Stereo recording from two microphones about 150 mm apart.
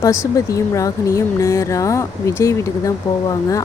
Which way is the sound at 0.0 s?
20° left (ahead or behind).